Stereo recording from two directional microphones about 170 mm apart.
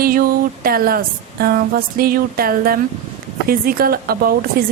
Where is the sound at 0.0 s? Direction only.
60° right (ahead or behind).